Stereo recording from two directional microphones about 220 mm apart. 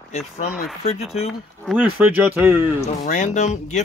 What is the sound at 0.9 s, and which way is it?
Speech, 30° left (ahead or behind).